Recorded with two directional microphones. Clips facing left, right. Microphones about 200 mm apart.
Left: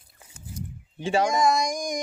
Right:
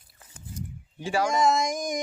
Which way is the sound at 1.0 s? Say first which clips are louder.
Left 3 dB; 25° left (ahead or behind).